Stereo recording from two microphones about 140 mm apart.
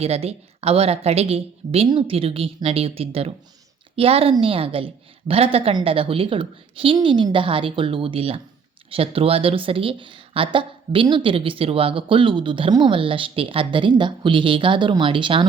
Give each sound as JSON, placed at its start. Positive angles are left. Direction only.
{"t": 0.0, "sound": "a woman's voice", "side_deg": -45}